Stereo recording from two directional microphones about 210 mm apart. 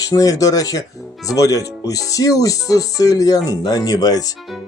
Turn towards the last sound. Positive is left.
turn(degrees=15)  # may be behind; listen again after turning